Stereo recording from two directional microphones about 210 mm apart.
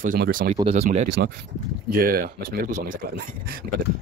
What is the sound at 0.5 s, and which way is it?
Speech, 30° right (ahead or behind).